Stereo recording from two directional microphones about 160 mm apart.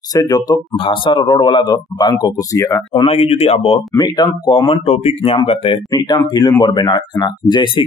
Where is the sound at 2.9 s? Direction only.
40° left (ahead or behind).